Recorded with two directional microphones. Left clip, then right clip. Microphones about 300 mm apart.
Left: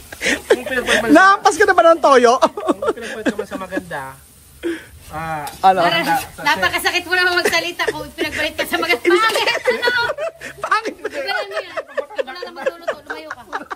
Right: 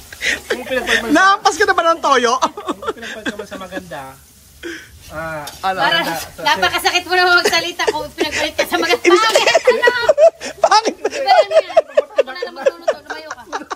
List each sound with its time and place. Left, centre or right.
0.2 s speech: centre
5.9 s a woman's voice: centre
12.5 s a sound: centre